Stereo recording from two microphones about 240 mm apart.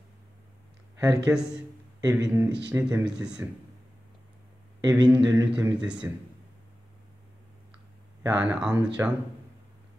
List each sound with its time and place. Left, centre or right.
0.9 s speech: centre
4.8 s speech: centre
8.2 s speech: centre